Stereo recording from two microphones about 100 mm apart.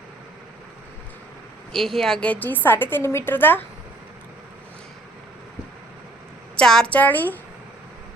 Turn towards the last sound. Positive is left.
turn(degrees=20)  # may be behind; listen again after turning